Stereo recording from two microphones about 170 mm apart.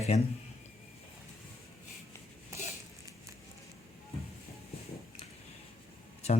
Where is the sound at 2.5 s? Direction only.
15° right (ahead or behind).